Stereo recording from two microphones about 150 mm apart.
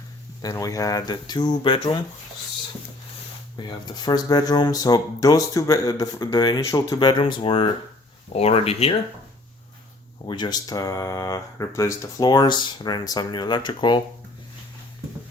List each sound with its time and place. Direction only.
0.4 s speech: 20° left (ahead or behind)
3.6 s speech: 30° left (ahead or behind)
10.2 s speech: 30° left (ahead or behind)